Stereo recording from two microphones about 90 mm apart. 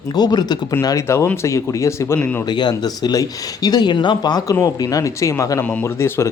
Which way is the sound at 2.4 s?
55° left (ahead or behind).